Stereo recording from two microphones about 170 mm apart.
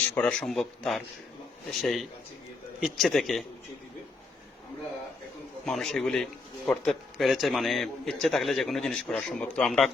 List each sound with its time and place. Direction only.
0.1 s a man's voice: 5° left (ahead or behind)
5.6 s a man's voice: centre (ahead or behind)